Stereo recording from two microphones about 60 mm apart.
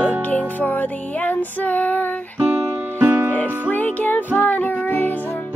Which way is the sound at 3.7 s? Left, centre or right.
Left.